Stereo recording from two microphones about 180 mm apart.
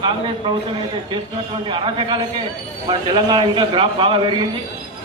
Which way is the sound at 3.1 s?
25° right (ahead or behind).